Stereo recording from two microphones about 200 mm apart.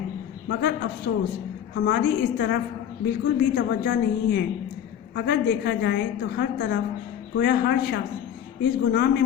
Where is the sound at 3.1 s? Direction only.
55° left (ahead or behind).